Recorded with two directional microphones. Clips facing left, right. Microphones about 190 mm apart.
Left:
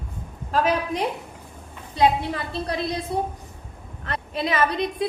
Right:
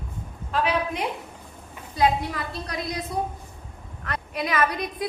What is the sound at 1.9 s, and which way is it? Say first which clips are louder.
A woman's voice: left 2 dB; 25° left (ahead or behind).